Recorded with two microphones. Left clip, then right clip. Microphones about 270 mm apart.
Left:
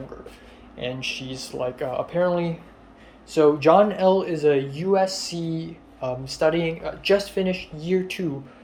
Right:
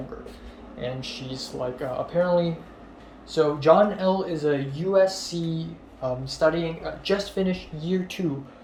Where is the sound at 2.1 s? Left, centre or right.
Left.